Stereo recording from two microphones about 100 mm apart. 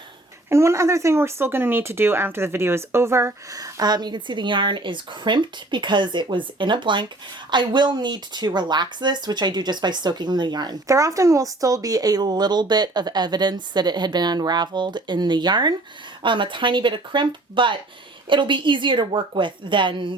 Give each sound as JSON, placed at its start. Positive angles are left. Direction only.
{"t": 0.5, "sound": "speech", "side_deg": -30}
{"t": 10.8, "sound": "speech", "side_deg": -30}